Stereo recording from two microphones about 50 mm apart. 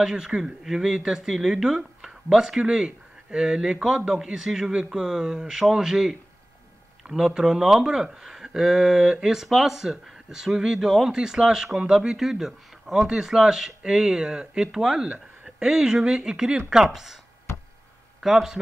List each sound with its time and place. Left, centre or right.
0.0 s speech: centre
0.4 s a man's voice: centre
18.2 s speech: centre